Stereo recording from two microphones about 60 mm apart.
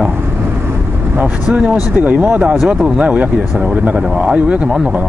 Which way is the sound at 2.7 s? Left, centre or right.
Centre.